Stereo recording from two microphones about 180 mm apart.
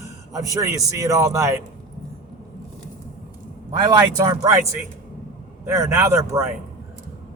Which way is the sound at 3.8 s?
20° right (ahead or behind).